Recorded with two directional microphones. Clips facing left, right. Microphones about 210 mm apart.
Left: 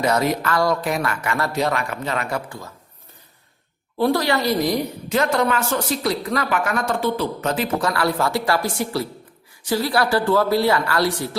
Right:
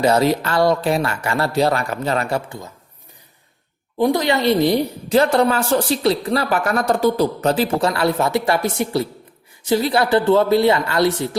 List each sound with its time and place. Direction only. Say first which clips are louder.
0.0 s a woman's voice: right 4 dB; 30° right (ahead or behind)
2.5 s a woman's voice: right 2 dB; 20° right (ahead or behind)
3.9 s a woman's voice: right 2 dB; 15° right (ahead or behind)